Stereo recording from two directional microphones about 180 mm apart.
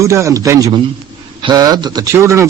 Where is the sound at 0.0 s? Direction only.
15° right (ahead or behind).